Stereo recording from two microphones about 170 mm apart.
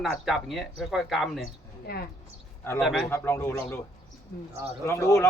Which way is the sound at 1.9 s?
65° left (ahead or behind).